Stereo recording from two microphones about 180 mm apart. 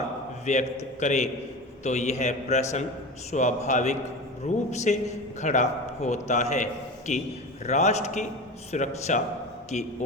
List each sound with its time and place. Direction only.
0.5 s a man's voice: 40° left (ahead or behind)